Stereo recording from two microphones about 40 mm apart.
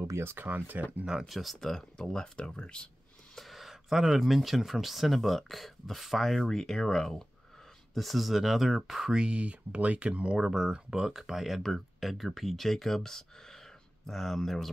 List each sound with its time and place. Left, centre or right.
0.0 s speech: right
0.7 s speech: right
1.2 s speech: centre
2.0 s speech: left
3.3 s speech: centre
7.9 s speech: centre
9.1 s speech: right
10.4 s speech: centre